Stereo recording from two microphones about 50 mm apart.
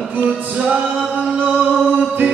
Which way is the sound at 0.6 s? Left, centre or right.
Right.